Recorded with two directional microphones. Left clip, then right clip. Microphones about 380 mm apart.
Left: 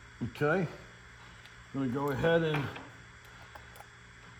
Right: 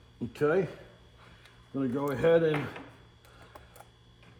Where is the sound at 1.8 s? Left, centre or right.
Left.